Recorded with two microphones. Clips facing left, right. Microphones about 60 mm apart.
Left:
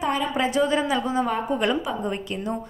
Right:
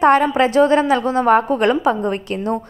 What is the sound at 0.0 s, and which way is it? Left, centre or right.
A woman's voice, right.